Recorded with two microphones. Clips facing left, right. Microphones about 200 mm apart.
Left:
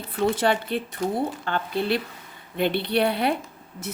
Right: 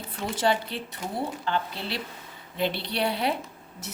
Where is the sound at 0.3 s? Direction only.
55° left (ahead or behind).